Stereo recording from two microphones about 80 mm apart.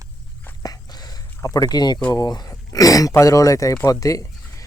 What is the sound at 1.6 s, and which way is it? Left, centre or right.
Speech, left.